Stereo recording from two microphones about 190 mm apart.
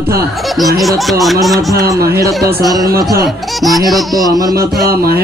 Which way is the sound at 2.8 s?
50° right (ahead or behind).